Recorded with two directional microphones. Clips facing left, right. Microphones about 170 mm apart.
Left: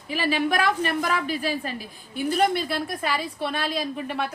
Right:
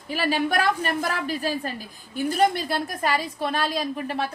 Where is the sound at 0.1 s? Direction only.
40° right (ahead or behind).